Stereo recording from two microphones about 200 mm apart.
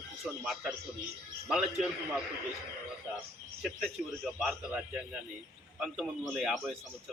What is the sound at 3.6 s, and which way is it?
A man's voice, centre (ahead or behind).